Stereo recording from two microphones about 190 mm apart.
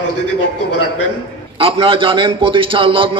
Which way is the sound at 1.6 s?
30° right (ahead or behind).